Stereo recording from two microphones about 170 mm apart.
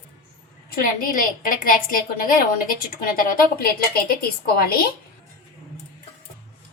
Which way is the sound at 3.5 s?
60° left (ahead or behind).